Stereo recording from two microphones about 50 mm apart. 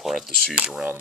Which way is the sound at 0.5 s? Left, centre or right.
Right.